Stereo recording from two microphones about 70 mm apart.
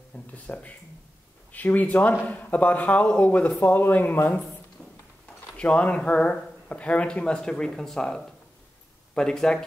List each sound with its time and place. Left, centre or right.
0.1 s speech: centre
5.6 s speech: centre